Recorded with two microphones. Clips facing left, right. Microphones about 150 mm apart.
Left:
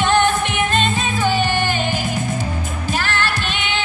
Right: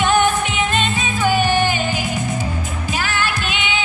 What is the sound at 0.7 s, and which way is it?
Music, 45° left (ahead or behind).